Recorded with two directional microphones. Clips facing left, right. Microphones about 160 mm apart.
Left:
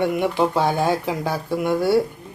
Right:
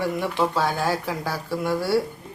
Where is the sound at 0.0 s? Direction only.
15° left (ahead or behind).